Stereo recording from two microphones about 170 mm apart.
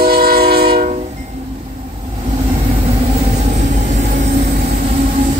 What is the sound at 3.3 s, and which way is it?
Vehicle, 45° right (ahead or behind).